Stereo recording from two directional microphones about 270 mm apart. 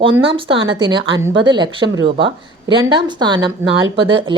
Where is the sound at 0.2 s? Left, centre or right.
Centre.